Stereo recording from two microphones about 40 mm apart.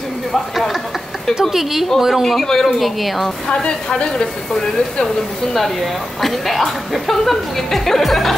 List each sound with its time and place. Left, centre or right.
0.3 s a woman's voice: centre
2.2 s speech: centre
4.1 s speech: centre
5.0 s speech: centre